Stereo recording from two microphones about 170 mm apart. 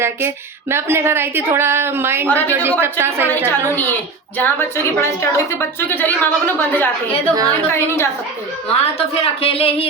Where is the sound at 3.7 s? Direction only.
10° left (ahead or behind).